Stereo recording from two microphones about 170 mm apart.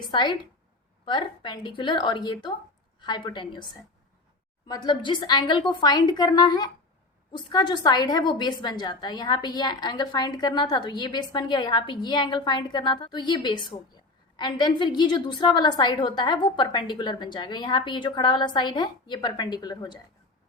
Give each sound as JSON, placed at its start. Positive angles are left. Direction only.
{"t": 0.0, "sound": "a woman's voice", "side_deg": 25}
{"t": 4.7, "sound": "a woman's voice", "side_deg": 25}